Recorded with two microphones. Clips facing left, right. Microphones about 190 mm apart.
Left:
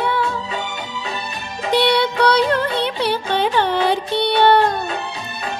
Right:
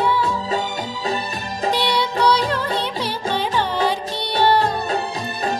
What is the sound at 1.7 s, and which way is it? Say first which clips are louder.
Music: left 8 dB; 60° left (ahead or behind).